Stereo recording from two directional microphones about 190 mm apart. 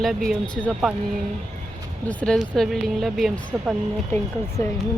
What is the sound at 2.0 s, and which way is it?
Speech, 5° left (ahead or behind).